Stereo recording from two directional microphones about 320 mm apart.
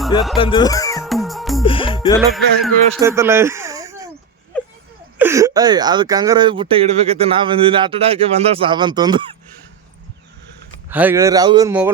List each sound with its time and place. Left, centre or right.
0.3 s speech: centre
0.9 s music: centre
1.6 s music: centre
2.1 s music: centre
3.0 s a sound: centre
4.5 s a sound: centre
5.1 s speech: centre
10.8 s speech: centre